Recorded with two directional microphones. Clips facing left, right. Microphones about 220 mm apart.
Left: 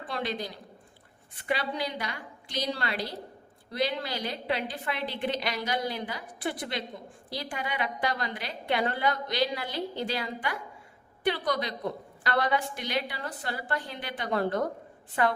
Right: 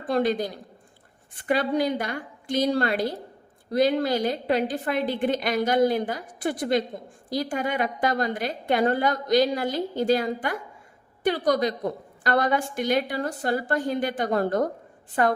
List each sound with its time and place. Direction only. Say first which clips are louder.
0.1 s a woman's voice: right 10 dB; 45° right (ahead or behind)